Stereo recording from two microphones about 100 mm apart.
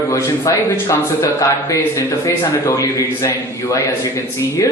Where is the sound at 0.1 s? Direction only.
30° left (ahead or behind).